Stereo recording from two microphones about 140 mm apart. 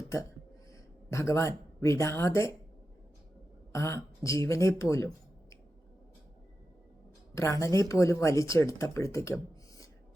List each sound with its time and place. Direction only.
0.7 s speech: 20° left (ahead or behind)
3.7 s speech: 20° left (ahead or behind)
7.3 s speech: 25° left (ahead or behind)